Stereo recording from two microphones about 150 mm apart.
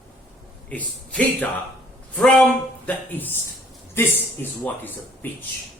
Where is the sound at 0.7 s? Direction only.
10° left (ahead or behind).